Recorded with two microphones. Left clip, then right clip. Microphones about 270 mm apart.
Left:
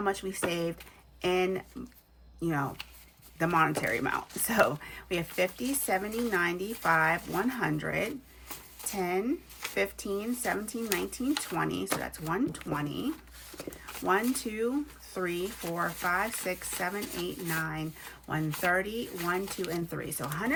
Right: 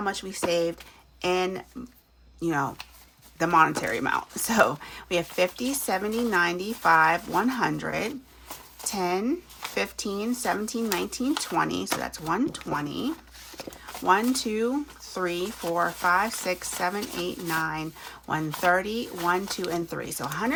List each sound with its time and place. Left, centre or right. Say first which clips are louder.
0.0 s speech: right 2 dB; centre